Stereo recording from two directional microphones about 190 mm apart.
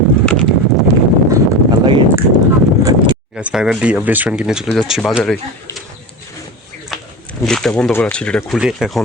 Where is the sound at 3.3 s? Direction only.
5° right (ahead or behind).